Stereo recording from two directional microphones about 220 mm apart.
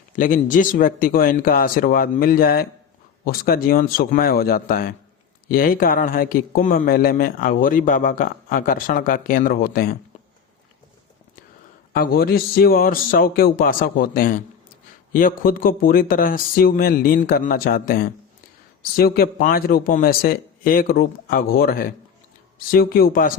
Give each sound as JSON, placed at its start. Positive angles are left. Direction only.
{"t": 0.2, "sound": "speech", "side_deg": 35}
{"t": 11.9, "sound": "speech", "side_deg": 45}